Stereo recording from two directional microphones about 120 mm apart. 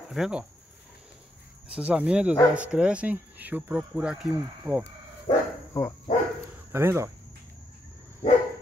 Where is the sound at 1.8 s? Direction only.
10° right (ahead or behind).